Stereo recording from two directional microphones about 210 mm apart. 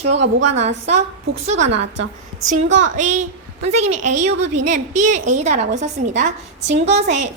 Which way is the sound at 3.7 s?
30° right (ahead or behind).